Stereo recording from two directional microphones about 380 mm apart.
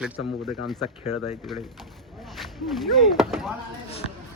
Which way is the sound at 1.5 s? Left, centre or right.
Centre.